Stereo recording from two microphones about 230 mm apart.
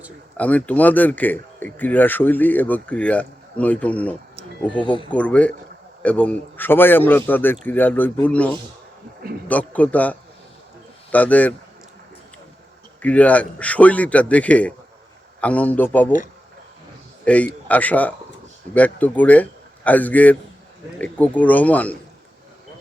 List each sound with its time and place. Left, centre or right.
0.3 s speech: centre
5.1 s a man's voice: centre
13.0 s a man's voice: centre
17.2 s speech: centre